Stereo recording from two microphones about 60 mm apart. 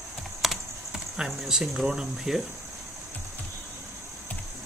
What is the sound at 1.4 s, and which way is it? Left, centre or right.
Speech, centre.